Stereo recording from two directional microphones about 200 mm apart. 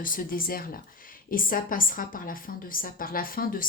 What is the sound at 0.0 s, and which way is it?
A woman's voice, 45° left (ahead or behind).